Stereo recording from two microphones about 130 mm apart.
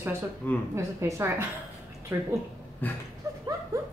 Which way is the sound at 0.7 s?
20° right (ahead or behind).